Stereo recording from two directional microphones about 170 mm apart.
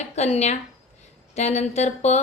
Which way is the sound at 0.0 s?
40° left (ahead or behind).